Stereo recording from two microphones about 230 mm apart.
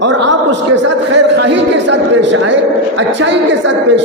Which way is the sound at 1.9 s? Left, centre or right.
Right.